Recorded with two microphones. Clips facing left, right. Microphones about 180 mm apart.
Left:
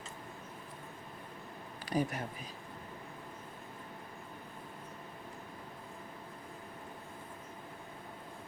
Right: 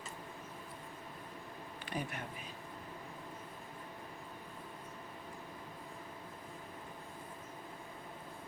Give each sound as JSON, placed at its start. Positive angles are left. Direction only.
{"t": 1.8, "sound": "speech", "side_deg": 40}